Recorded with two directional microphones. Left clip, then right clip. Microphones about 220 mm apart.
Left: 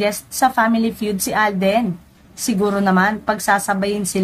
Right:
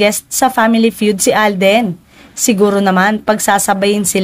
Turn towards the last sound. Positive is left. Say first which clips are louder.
# right 7 dB
turn(degrees=-40)  # may be behind; listen again after turning